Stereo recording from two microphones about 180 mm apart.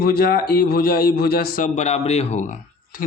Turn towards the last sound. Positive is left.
turn(degrees=50)  # may be behind; listen again after turning